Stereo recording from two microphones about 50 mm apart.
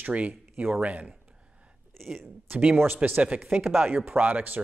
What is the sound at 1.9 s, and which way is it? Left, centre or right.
Speech, centre.